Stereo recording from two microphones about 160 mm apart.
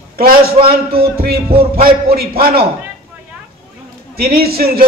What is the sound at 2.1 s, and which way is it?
Speech, 70° right (ahead or behind).